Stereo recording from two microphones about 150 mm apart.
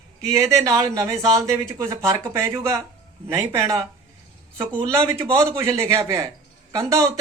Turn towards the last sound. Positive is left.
turn(degrees=-20)  # may be behind; listen again after turning